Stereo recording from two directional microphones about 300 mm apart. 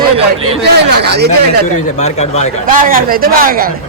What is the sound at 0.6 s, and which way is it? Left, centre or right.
Speech, right.